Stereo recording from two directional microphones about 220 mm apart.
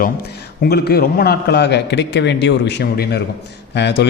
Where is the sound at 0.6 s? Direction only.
45° left (ahead or behind).